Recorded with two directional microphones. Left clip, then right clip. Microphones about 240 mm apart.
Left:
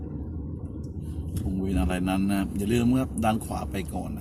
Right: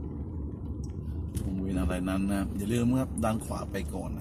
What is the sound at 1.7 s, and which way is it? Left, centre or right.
A man's voice, centre.